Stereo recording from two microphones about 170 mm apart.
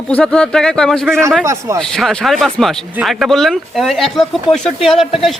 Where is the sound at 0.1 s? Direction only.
5° left (ahead or behind).